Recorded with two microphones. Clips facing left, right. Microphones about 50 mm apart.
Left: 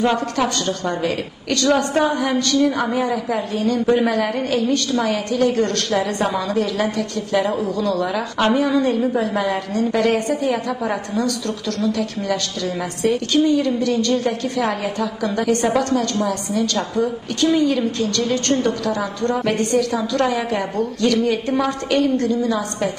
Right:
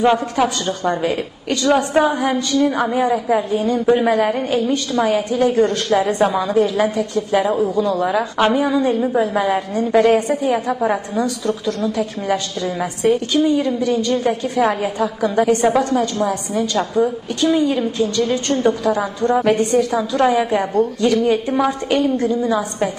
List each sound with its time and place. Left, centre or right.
0.0 s a woman's voice: centre